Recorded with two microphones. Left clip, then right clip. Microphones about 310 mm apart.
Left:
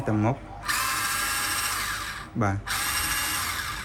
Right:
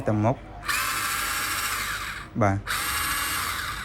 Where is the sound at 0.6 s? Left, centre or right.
Centre.